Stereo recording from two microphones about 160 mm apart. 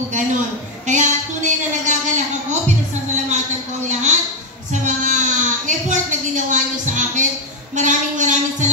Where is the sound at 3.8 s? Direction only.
50° right (ahead or behind).